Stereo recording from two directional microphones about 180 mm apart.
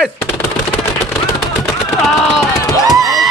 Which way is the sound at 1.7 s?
Centre (ahead or behind).